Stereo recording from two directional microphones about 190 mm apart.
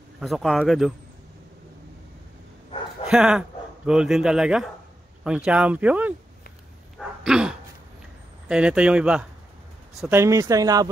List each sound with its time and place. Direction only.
0.2 s speech: centre (ahead or behind)
3.1 s speech: 5° right (ahead or behind)
7.0 s a sound: 5° right (ahead or behind)
8.5 s speech: 5° right (ahead or behind)